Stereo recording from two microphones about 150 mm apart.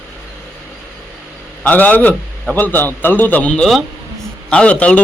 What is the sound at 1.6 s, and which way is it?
A man's voice, 10° left (ahead or behind).